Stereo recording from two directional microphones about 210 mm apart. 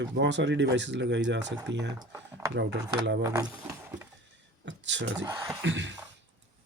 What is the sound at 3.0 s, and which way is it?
Speech, 60° right (ahead or behind).